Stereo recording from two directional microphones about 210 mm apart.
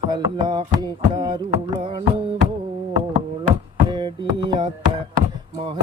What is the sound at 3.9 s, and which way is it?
Beatboxing, 20° right (ahead or behind).